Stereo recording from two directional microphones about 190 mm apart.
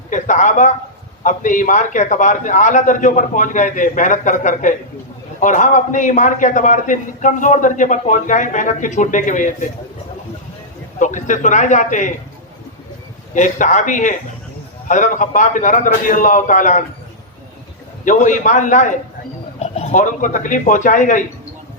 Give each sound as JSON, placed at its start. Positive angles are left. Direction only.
{"t": 0.1, "sound": "a man's voice", "side_deg": 40}
{"t": 11.0, "sound": "a man's voice", "side_deg": 40}
{"t": 13.3, "sound": "a man's voice", "side_deg": 40}
{"t": 18.0, "sound": "a man's voice", "side_deg": 40}